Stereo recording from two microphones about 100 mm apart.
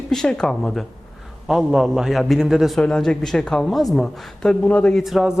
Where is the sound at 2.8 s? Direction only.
10° left (ahead or behind).